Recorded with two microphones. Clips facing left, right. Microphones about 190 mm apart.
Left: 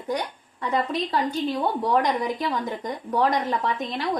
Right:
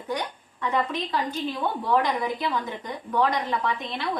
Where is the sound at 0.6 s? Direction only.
40° left (ahead or behind).